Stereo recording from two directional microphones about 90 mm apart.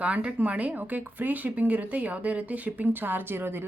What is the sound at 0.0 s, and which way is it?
A woman's voice, 15° right (ahead or behind).